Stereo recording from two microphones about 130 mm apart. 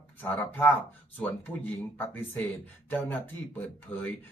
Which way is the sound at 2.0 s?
15° left (ahead or behind).